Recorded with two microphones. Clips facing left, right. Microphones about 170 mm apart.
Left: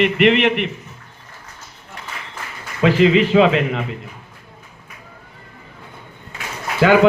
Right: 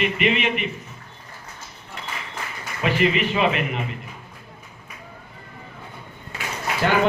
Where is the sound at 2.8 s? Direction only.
90° left.